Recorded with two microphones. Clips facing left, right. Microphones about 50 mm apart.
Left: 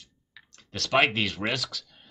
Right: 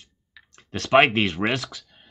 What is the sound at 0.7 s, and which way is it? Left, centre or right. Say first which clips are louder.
Speech: right 6 dB; right.